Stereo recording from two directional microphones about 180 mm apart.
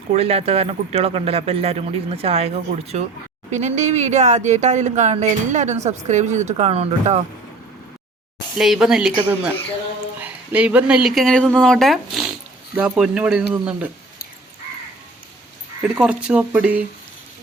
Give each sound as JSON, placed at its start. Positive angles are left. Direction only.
{"t": 0.1, "sound": "speech", "side_deg": -35}
{"t": 8.5, "sound": "speech", "side_deg": -5}
{"t": 16.0, "sound": "speech", "side_deg": -5}